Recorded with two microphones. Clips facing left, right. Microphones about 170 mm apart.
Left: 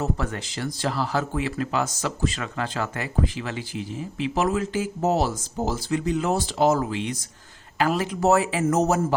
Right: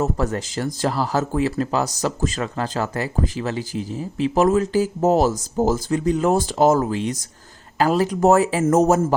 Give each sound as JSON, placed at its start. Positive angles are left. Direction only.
{"t": 0.0, "sound": "speech", "side_deg": -40}